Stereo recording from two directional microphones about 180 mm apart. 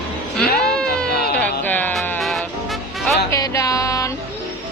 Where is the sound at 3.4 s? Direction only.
20° left (ahead or behind).